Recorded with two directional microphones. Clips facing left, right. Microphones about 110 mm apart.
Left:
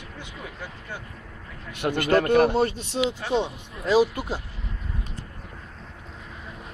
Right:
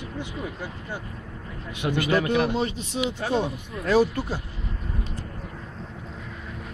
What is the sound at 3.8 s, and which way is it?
Speech, 15° left (ahead or behind).